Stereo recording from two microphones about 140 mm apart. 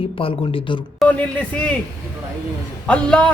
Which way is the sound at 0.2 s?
40° left (ahead or behind).